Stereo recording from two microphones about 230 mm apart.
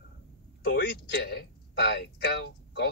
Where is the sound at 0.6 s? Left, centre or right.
Left.